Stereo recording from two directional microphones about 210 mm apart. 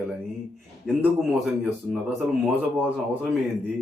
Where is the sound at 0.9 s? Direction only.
Centre (ahead or behind).